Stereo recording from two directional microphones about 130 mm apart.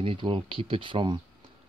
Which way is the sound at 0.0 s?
45° right (ahead or behind).